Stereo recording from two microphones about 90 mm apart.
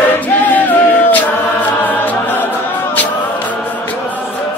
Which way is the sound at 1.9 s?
20° left (ahead or behind).